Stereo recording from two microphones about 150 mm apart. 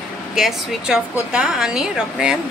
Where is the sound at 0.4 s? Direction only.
5° right (ahead or behind).